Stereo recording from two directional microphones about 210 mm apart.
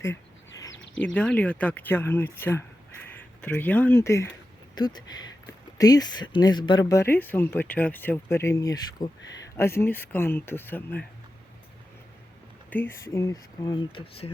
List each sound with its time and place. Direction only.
0.7 s a sound: 60° left (ahead or behind)
1.0 s speech: 5° left (ahead or behind)
12.7 s speech: 10° left (ahead or behind)